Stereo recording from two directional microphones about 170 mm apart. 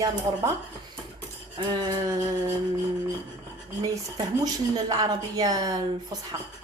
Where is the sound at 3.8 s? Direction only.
20° right (ahead or behind).